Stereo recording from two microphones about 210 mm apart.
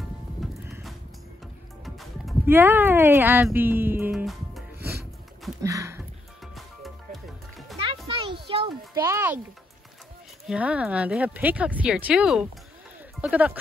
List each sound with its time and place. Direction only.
0.4 s music: centre (ahead or behind)
2.4 s speech: 10° right (ahead or behind)
5.6 s a sound: 15° right (ahead or behind)
6.5 s music: centre (ahead or behind)
7.8 s music: 25° right (ahead or behind)
9.0 s speech: 10° right (ahead or behind)
10.4 s speech: 5° right (ahead or behind)